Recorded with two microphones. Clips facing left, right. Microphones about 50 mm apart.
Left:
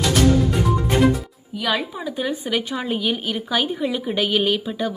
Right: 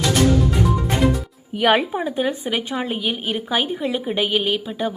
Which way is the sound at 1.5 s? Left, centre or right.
Right.